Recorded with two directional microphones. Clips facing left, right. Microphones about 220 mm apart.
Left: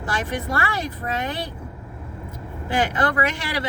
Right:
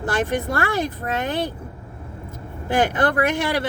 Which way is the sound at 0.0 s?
55° right (ahead or behind).